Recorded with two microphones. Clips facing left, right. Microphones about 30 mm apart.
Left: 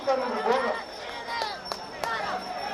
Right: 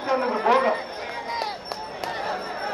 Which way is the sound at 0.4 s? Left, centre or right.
Right.